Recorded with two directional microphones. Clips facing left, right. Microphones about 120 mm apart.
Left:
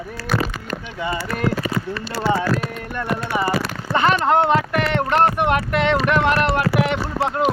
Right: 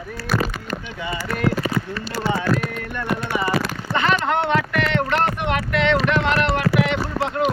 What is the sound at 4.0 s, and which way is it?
Speech, 40° left (ahead or behind).